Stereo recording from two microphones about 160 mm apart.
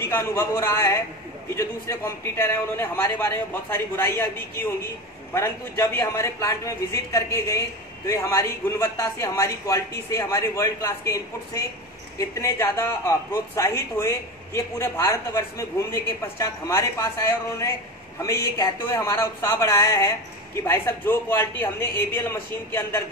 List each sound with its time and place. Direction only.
0.1 s speech: 15° left (ahead or behind)
5.3 s speech: 15° left (ahead or behind)
18.2 s speech: 20° left (ahead or behind)